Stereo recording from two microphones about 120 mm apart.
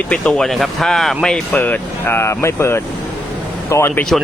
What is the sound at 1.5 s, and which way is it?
Speech, 15° left (ahead or behind).